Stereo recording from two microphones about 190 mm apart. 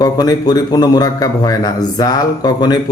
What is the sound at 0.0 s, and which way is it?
Speech, 20° left (ahead or behind).